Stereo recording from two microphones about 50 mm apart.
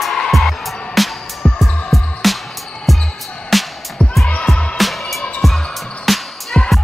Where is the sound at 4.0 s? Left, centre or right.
Left.